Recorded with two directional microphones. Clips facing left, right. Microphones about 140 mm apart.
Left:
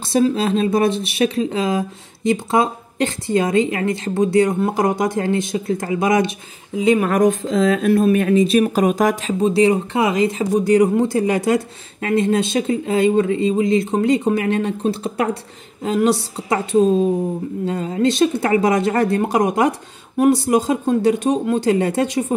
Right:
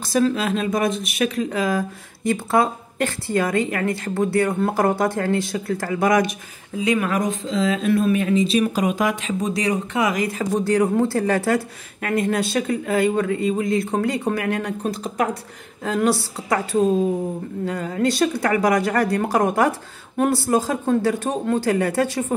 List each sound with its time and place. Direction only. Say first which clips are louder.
0.4 s speech: left 4 dB; 30° left (ahead or behind)
7.0 s speech: left 6 dB; 50° left (ahead or behind); by 22.2 s 20° left (ahead or behind)